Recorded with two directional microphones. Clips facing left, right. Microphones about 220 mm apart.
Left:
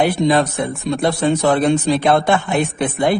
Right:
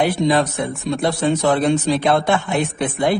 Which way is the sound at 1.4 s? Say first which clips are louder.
Left 2 dB; 55° left (ahead or behind).